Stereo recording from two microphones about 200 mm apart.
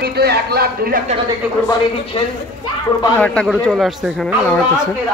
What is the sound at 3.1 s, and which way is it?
A man's voice, 5° left (ahead or behind).